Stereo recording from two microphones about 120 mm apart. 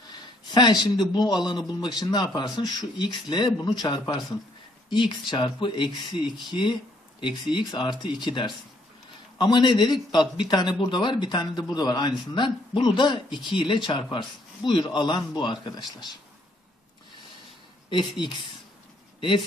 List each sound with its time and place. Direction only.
0.5 s speech: 40° left (ahead or behind)
10.2 s speech: 5° right (ahead or behind)
10.5 s speech: 40° left (ahead or behind)
17.8 s a woman's voice: 40° left (ahead or behind)
19.1 s a sound: 45° left (ahead or behind)